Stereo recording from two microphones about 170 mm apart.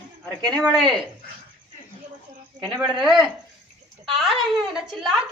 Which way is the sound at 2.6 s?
Centre (ahead or behind).